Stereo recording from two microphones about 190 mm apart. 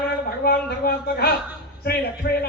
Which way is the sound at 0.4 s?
50° left (ahead or behind).